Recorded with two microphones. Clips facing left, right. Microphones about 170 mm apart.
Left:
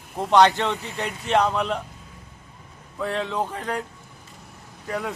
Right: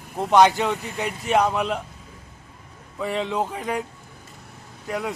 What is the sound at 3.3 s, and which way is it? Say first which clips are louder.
Speech: right 2 dB; 10° right (ahead or behind).